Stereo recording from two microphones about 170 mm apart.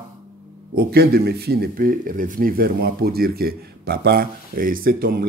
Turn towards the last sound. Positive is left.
turn(degrees=-60)  # may be behind; listen again after turning